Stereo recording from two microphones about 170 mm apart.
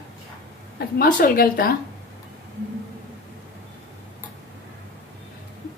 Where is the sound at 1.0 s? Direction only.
55° left (ahead or behind).